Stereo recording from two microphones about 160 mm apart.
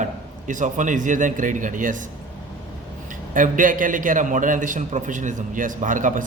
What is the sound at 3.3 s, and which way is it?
A man's voice, 55° right (ahead or behind).